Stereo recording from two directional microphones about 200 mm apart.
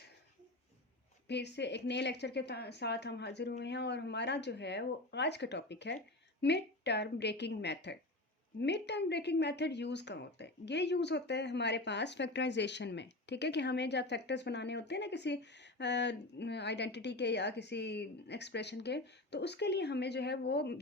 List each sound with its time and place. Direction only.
1.3 s a woman's voice: 60° left (ahead or behind)